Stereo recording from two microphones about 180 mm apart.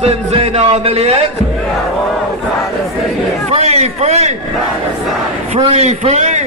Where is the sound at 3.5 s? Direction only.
35° right (ahead or behind).